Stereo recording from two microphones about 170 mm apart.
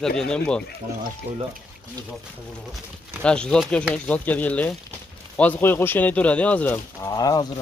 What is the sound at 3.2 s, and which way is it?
Speech, 5° left (ahead or behind).